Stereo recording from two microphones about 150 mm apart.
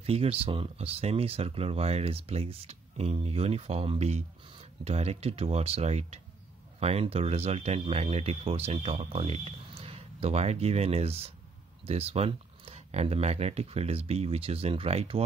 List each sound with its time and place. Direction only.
0.0 s speech: 40° right (ahead or behind)